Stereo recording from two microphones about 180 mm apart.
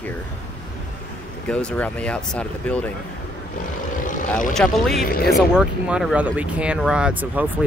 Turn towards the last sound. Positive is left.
turn(degrees=-10)  # may be behind; listen again after turning